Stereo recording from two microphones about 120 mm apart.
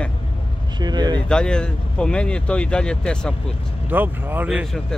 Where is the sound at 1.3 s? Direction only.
5° left (ahead or behind).